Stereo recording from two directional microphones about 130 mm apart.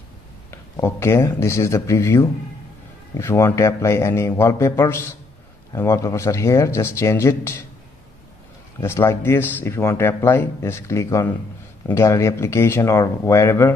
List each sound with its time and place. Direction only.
0.5 s speech: 20° left (ahead or behind)
8.8 s speech: 20° left (ahead or behind)